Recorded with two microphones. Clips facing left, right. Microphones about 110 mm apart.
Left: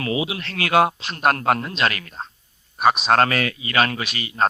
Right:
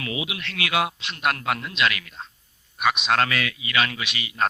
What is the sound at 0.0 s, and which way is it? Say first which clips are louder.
Speech: left 6 dB; 35° left (ahead or behind).